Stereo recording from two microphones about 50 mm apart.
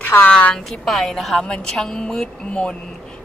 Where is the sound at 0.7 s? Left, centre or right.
Centre.